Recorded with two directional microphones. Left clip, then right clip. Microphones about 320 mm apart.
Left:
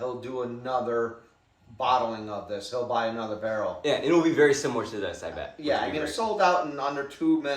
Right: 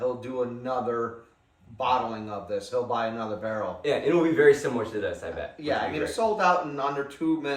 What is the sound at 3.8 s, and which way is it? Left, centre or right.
Speech, centre.